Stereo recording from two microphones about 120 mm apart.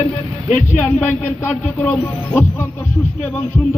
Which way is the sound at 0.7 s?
15° left (ahead or behind).